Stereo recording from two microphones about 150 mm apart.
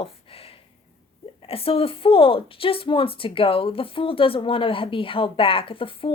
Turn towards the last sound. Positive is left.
turn(degrees=35)  # may be behind; listen again after turning